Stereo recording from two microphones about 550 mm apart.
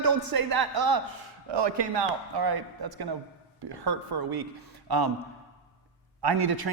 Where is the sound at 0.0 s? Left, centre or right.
Right.